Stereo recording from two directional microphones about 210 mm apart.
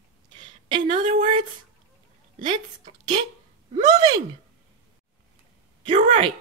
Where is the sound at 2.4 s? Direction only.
35° right (ahead or behind).